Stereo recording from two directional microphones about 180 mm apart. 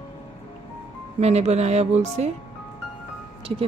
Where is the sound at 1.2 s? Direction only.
35° right (ahead or behind).